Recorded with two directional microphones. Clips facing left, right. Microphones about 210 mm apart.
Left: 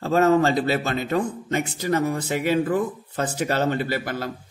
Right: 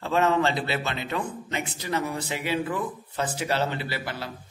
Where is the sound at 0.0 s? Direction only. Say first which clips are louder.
Left 5 dB; 45° left (ahead or behind).